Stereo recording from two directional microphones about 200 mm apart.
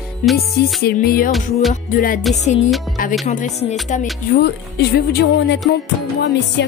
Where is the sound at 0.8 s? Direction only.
50° left (ahead or behind).